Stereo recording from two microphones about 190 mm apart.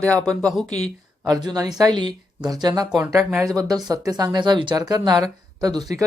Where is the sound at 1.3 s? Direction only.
20° right (ahead or behind).